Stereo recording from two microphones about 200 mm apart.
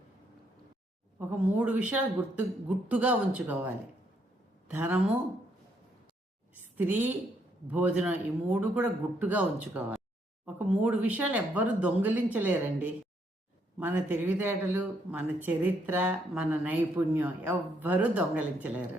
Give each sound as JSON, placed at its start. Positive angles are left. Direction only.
{"t": 1.5, "sound": "speech", "side_deg": -5}
{"t": 4.7, "sound": "speech", "side_deg": -10}
{"t": 6.5, "sound": "a sound", "side_deg": -10}
{"t": 7.7, "sound": "speech", "side_deg": -5}